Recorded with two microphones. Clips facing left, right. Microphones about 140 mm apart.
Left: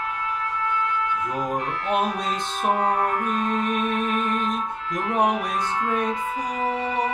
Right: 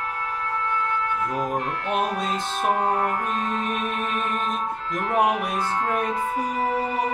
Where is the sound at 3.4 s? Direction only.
Centre (ahead or behind).